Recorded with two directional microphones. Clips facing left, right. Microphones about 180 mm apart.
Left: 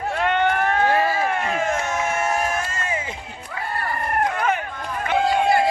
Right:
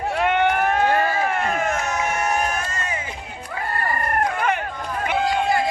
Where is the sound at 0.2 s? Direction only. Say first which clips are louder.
Right 1 dB; 15° right (ahead or behind).